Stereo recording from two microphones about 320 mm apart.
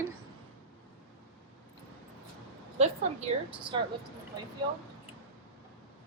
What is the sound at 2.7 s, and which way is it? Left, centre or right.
Speech, centre.